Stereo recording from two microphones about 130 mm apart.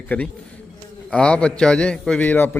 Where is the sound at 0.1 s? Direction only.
10° left (ahead or behind).